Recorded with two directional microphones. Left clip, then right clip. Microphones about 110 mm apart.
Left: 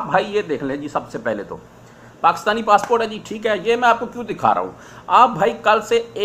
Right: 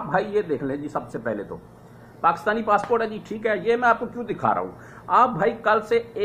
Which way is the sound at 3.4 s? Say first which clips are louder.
Left 4 dB; 25° left (ahead or behind).